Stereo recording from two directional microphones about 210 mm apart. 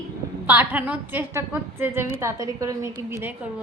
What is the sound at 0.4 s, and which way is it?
A woman's voice, 10° right (ahead or behind).